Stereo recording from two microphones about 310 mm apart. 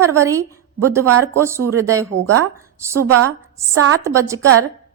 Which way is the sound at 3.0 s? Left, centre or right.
Right.